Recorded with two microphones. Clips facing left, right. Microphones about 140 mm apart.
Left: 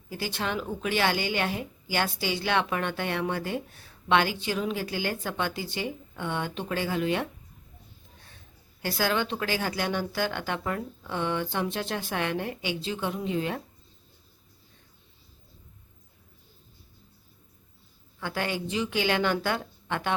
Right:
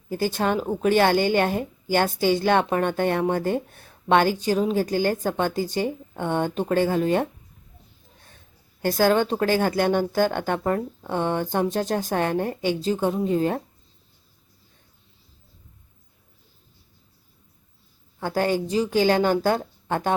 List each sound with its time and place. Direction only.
0.1 s a woman's voice: 45° right (ahead or behind)
8.8 s a woman's voice: 45° right (ahead or behind)
18.2 s a woman's voice: 40° right (ahead or behind)